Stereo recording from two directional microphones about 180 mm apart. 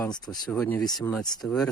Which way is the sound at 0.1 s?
20° left (ahead or behind).